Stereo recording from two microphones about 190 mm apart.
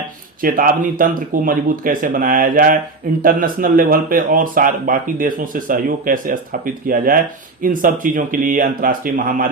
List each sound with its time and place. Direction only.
0.4 s speech: 45° right (ahead or behind)